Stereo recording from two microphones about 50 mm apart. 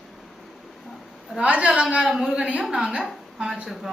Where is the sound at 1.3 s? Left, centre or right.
Right.